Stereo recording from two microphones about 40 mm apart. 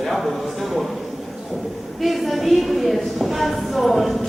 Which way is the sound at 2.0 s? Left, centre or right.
Centre.